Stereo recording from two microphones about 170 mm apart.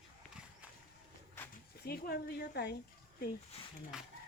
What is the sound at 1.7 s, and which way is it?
Speech, 65° left (ahead or behind).